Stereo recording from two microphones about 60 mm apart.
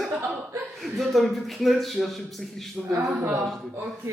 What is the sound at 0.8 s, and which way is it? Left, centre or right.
Speech, centre.